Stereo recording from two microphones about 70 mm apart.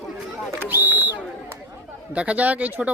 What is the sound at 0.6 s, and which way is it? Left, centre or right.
A man's voice, right.